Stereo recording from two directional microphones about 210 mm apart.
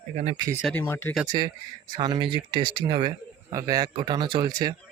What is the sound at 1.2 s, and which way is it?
Speech, 20° right (ahead or behind).